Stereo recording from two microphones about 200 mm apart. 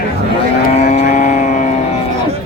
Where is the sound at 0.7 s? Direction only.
35° left (ahead or behind).